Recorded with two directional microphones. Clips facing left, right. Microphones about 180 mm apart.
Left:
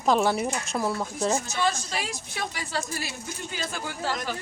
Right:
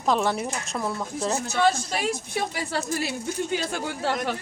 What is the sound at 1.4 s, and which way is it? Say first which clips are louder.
Speech: right 5 dB; 60° right (ahead or behind).